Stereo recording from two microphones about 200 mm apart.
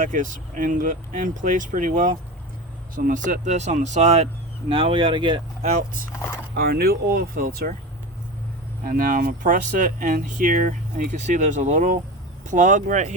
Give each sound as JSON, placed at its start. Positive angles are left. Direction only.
{"t": 0.0, "sound": "speech", "side_deg": -40}
{"t": 8.8, "sound": "speech", "side_deg": -45}